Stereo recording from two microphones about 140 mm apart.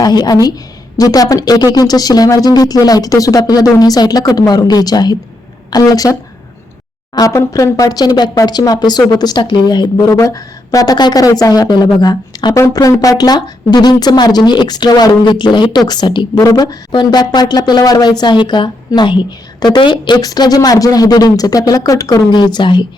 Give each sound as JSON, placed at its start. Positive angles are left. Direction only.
{"t": 0.0, "sound": "speech", "side_deg": 30}
{"t": 7.2, "sound": "speech", "side_deg": 25}